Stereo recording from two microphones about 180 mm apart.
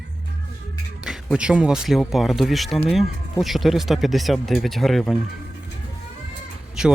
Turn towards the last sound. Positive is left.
turn(degrees=-5)  # may be behind; listen again after turning